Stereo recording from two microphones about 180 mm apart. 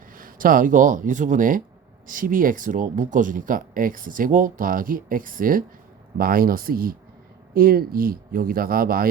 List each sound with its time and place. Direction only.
0.1 s speech: 50° right (ahead or behind)